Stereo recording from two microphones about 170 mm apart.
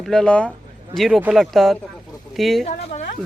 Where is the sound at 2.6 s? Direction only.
40° left (ahead or behind).